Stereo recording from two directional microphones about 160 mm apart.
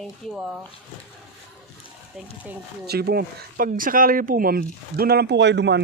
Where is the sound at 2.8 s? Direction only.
80° right.